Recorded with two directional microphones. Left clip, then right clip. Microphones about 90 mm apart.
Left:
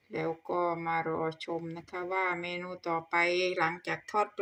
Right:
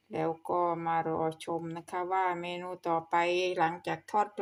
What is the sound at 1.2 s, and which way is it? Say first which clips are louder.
Speech: right 1 dB; 50° right (ahead or behind).